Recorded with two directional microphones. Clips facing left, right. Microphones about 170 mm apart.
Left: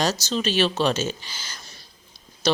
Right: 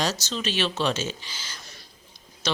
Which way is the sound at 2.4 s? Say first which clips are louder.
Left 6 dB; 40° left (ahead or behind).